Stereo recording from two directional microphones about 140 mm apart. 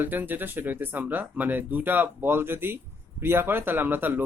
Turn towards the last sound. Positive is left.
turn(degrees=-15)  # may be behind; listen again after turning